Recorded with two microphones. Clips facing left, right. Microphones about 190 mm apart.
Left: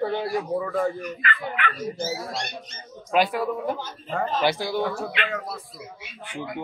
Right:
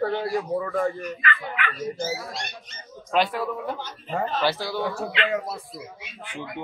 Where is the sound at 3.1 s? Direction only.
10° left (ahead or behind).